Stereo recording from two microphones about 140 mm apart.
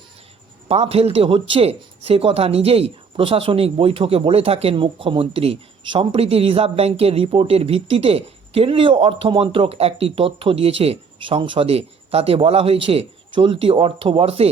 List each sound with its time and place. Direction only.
0.7 s speech: 45° right (ahead or behind)